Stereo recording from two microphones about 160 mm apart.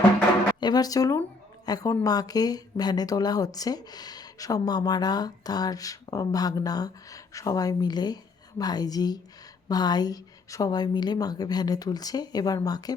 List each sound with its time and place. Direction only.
0.6 s a woman's voice: 25° left (ahead or behind)